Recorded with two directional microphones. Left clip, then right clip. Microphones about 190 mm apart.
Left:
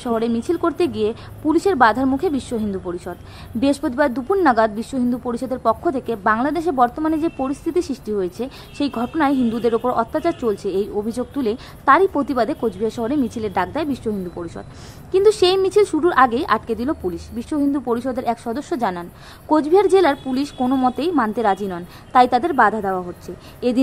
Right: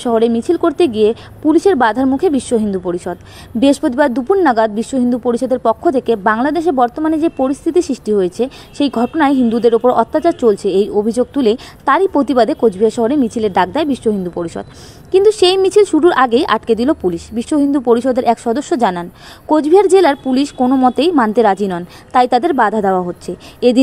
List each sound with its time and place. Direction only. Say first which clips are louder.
0.0 s a woman's voice: right 8 dB; 30° right (ahead or behind)